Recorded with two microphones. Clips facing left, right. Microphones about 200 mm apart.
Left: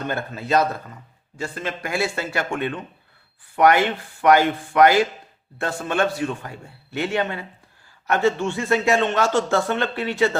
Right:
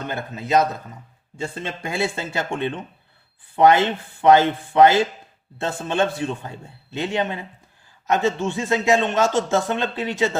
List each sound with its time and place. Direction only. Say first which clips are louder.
0.1 s a man's voice: right 1 dB; 20° right (ahead or behind)